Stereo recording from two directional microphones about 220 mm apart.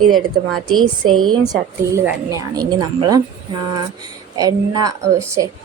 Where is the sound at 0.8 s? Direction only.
75° right (ahead or behind).